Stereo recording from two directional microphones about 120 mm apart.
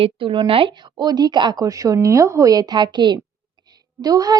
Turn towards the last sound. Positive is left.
turn(degrees=-35)  # may be behind; listen again after turning